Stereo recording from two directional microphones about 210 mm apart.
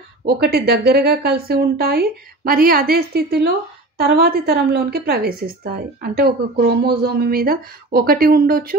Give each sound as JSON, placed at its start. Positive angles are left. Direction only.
{"t": 0.2, "sound": "a woman's voice", "side_deg": -50}